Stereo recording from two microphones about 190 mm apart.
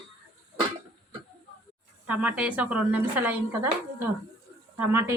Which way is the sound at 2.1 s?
5° right (ahead or behind).